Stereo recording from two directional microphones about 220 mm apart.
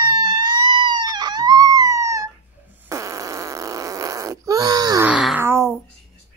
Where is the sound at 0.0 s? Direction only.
20° right (ahead or behind).